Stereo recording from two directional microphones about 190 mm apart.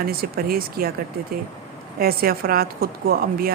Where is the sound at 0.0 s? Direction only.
50° right (ahead or behind).